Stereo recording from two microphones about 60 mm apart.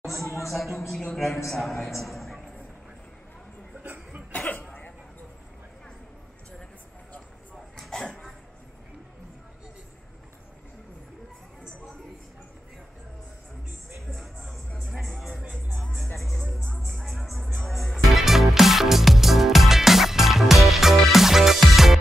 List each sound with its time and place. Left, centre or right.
0.0 s a sound: centre
0.5 s a man's voice: centre
3.8 s cough: right
4.3 s cough: left
14.1 s music: centre